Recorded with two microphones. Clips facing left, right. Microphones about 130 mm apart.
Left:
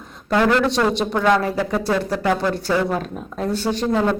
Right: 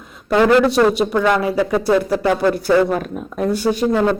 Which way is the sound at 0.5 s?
5° right (ahead or behind).